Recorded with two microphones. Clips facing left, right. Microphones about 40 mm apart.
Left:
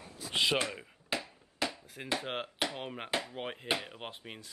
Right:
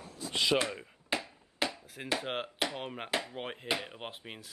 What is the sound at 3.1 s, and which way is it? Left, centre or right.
Speech, right.